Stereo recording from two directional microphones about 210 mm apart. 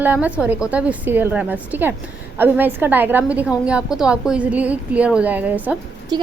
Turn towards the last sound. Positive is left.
turn(degrees=-20)  # may be behind; listen again after turning